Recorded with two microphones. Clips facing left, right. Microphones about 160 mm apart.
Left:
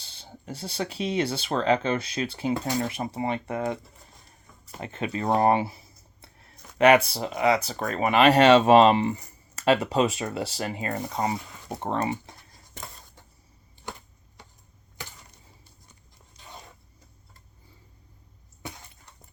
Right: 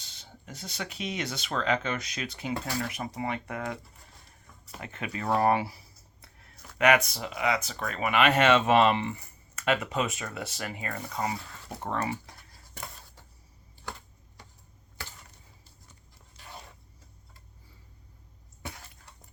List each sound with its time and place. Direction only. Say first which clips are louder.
0.0 s speech: left 5 dB; 30° left (ahead or behind)
4.8 s speech: left 6 dB; 30° left (ahead or behind)
16.4 s a sound: left 1 dB; 15° left (ahead or behind)